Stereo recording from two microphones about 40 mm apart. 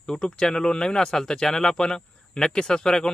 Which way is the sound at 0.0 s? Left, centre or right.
Centre.